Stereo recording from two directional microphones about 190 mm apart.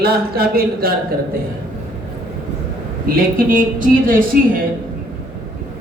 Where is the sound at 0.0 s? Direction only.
55° right (ahead or behind).